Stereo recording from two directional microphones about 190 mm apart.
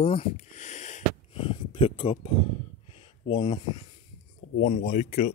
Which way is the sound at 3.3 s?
25° left (ahead or behind).